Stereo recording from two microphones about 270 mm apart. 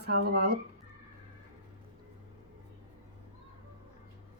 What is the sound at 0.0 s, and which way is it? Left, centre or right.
Speech, right.